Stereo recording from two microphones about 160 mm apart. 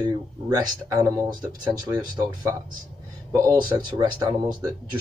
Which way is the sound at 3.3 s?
20° right (ahead or behind).